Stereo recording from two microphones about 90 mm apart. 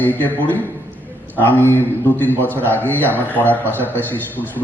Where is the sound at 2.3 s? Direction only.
20° right (ahead or behind).